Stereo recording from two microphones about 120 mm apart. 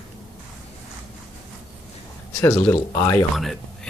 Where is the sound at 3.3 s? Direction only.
Centre (ahead or behind).